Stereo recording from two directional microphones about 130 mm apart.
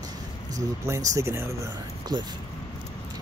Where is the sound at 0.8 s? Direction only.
25° right (ahead or behind).